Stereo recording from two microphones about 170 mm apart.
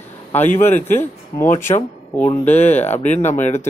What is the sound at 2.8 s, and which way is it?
Speech, 40° left (ahead or behind).